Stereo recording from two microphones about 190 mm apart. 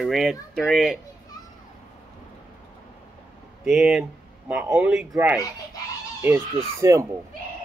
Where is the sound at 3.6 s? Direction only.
Centre (ahead or behind).